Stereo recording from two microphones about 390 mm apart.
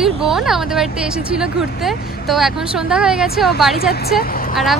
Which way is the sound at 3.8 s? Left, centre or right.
Left.